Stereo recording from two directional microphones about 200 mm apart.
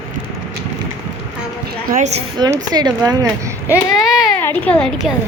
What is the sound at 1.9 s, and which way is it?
Speech, 40° right (ahead or behind).